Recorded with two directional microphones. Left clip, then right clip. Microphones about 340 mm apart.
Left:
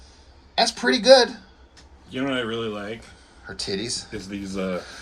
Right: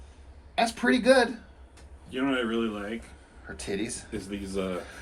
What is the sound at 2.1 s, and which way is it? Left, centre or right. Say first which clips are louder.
Speech: left 2 dB; left.